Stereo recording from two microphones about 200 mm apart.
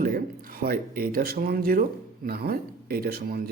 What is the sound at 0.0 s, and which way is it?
Speech, 45° right (ahead or behind).